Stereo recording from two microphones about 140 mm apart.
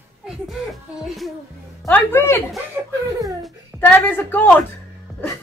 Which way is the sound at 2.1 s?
15° left (ahead or behind).